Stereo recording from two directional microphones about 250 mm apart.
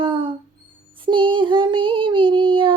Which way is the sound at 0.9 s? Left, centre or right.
Centre.